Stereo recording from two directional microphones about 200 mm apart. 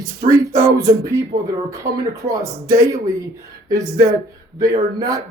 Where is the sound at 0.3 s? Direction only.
15° right (ahead or behind).